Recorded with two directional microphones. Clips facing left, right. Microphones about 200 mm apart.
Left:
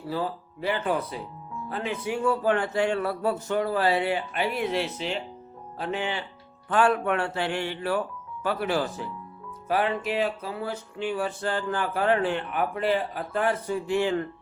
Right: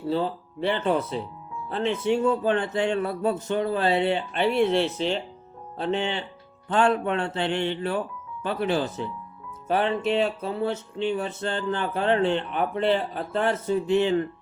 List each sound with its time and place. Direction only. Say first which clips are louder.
0.0 s music: right 4 dB; 25° right (ahead or behind)
5.7 s music: right 3 dB; 25° right (ahead or behind)